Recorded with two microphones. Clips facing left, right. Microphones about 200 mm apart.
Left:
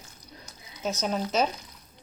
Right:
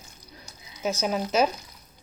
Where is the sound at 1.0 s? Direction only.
5° right (ahead or behind).